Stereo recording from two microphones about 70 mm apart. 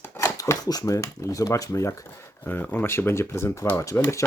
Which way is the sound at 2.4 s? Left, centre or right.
Left.